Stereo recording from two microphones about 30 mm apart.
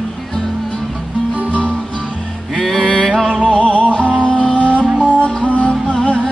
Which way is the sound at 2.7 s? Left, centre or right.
Left.